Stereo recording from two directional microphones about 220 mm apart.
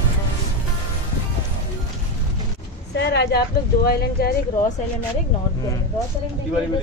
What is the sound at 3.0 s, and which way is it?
Speech, 50° left (ahead or behind).